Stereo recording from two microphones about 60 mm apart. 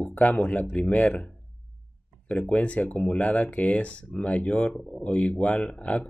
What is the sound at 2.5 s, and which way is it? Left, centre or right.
Speech, left.